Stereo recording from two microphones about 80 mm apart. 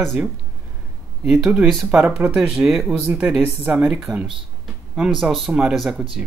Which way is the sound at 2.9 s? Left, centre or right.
Centre.